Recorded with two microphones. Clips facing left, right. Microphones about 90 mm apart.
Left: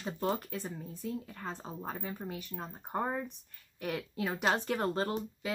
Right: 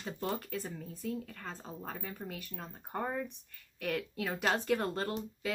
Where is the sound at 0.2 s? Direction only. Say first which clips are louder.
Left 3 dB; 25° left (ahead or behind).